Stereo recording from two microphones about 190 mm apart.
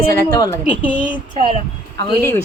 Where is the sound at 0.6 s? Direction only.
5° right (ahead or behind).